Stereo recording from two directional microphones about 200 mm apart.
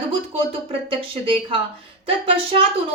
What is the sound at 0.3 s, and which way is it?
A woman's voice, 25° right (ahead or behind).